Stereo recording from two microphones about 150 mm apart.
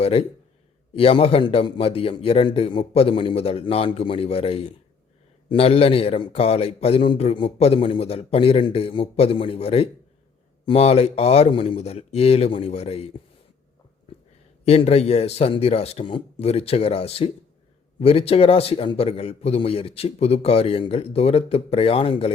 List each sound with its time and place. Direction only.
0.0 s a man's voice: 40° left (ahead or behind)
14.6 s a man's voice: 45° left (ahead or behind)